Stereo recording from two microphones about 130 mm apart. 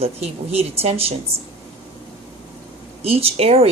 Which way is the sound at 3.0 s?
50° right (ahead or behind).